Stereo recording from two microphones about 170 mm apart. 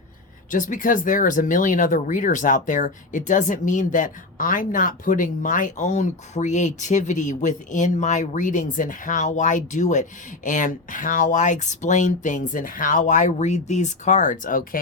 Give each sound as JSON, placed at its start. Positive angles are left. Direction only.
{"t": 0.5, "sound": "speech", "side_deg": 50}